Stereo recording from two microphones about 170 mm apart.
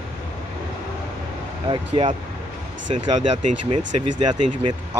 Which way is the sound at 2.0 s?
35° right (ahead or behind).